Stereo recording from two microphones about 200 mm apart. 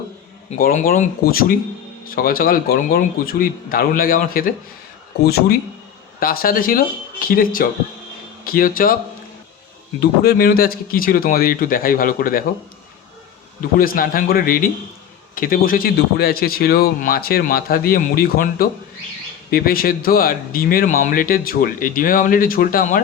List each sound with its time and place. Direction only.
0.6 s speech: 40° left (ahead or behind)
10.0 s speech: 50° left (ahead or behind)
13.6 s speech: 45° left (ahead or behind)